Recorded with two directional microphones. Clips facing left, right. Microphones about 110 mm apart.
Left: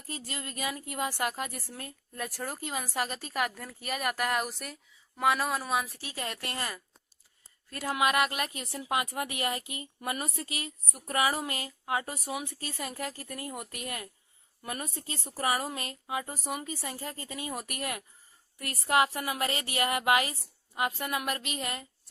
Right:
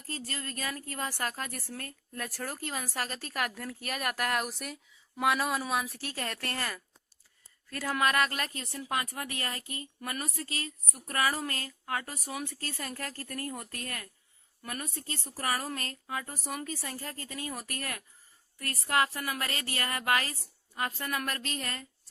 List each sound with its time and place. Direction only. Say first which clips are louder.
0.1 s a woman's voice: even; 15° left (ahead or behind)
6.1 s a woman's voice: left 1 dB; 15° left (ahead or behind)
7.9 s a woman's voice: left 1 dB; 15° left (ahead or behind)